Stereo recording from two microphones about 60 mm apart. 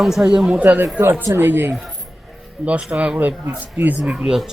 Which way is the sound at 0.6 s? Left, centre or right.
Right.